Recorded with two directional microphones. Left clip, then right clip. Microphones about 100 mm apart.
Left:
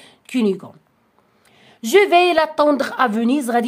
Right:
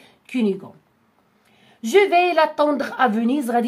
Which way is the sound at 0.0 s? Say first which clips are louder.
Left 3 dB; 55° left (ahead or behind).